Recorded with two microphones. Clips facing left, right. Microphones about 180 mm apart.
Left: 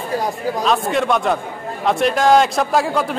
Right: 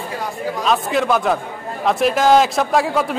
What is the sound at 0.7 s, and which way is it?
A man's voice, centre (ahead or behind).